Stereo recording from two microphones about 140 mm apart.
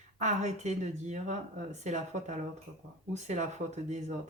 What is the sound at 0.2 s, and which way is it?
Speech, 55° right (ahead or behind).